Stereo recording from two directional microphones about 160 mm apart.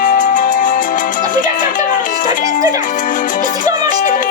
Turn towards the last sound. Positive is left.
turn(degrees=55)  # may be behind; listen again after turning